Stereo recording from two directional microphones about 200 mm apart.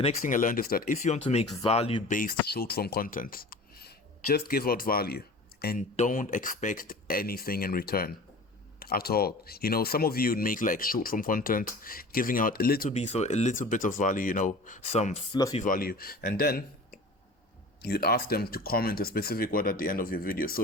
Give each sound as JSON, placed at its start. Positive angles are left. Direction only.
{"t": 0.2, "sound": "speech", "side_deg": 40}
{"t": 2.0, "sound": "speech", "side_deg": 45}
{"t": 13.0, "sound": "speech", "side_deg": 35}